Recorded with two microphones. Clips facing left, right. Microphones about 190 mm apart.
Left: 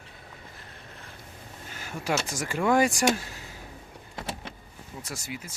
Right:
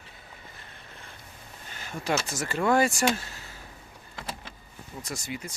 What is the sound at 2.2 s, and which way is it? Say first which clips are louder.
Speech: even; 10° left (ahead or behind).